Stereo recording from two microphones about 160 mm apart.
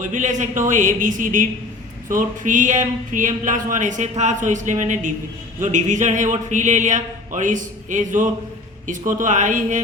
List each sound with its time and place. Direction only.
0.0 s speech: 50° right (ahead or behind)